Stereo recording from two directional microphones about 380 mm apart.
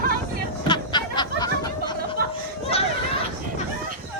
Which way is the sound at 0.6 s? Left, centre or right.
Centre.